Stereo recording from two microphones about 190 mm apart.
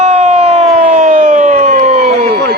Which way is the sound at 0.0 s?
35° right (ahead or behind).